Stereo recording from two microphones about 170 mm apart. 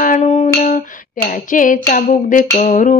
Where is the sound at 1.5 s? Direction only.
50° left (ahead or behind).